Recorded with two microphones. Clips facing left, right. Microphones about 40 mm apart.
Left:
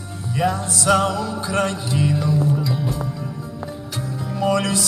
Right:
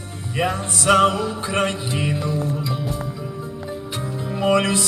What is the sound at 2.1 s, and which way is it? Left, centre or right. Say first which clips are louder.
Music: left 4 dB; centre.